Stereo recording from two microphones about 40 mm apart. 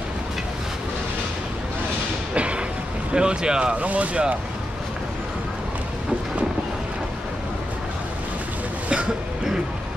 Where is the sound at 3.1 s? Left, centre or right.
Right.